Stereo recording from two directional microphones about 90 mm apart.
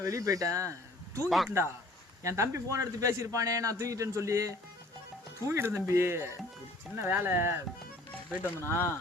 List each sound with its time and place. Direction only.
0.0 s a man's voice: 35° right (ahead or behind)
8.4 s speech: 25° left (ahead or behind)